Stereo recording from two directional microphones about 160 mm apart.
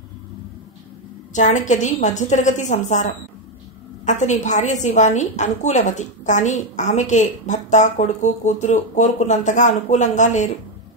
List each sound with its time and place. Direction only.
1.3 s a woman's voice: 50° left (ahead or behind)